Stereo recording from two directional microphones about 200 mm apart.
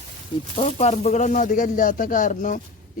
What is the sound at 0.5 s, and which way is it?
Speech, 35° left (ahead or behind).